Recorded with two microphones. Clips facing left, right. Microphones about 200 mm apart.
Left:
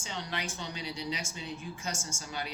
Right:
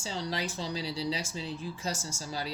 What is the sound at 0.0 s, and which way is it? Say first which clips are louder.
Speech: right 4 dB; 35° right (ahead or behind).